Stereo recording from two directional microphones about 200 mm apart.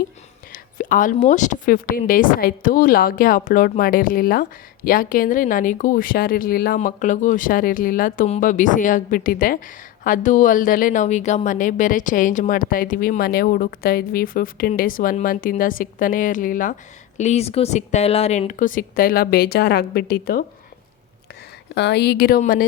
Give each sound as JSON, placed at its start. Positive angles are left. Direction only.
{"t": 0.5, "sound": "speech", "side_deg": 45}
{"t": 21.8, "sound": "speech", "side_deg": 55}